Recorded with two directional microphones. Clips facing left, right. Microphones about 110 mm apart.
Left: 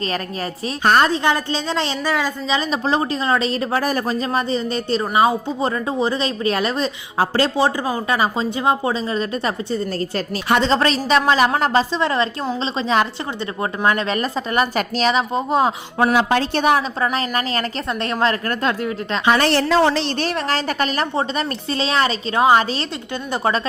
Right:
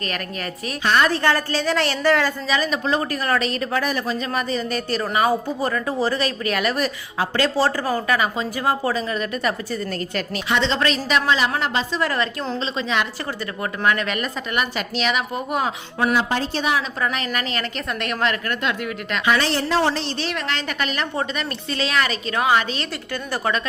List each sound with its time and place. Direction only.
0.8 s a woman's voice: 45° left (ahead or behind)
1.1 s speech: 20° left (ahead or behind)
2.5 s a woman's voice: 25° left (ahead or behind)
7.5 s a woman's voice: 15° left (ahead or behind); by 11.9 s 40° left (ahead or behind)
11.9 s a woman's voice: 25° left (ahead or behind)
16.1 s a woman's voice: 75° left (ahead or behind)
17.0 s a woman's voice: 35° left (ahead or behind)
19.4 s a woman's voice: 70° left (ahead or behind); by 20.1 s 85° left
20.3 s a woman's voice: 35° left (ahead or behind)